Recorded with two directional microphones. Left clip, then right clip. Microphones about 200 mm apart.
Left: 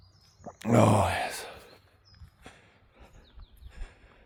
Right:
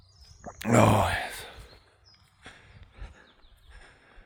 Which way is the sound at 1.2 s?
20° left (ahead or behind).